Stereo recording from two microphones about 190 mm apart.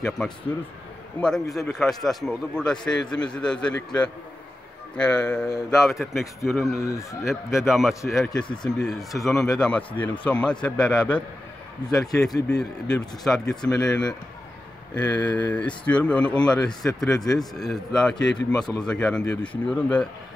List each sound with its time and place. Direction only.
1.5 s speech: centre (ahead or behind)
6.8 s speech: 15° left (ahead or behind)
7.2 s speech: centre (ahead or behind)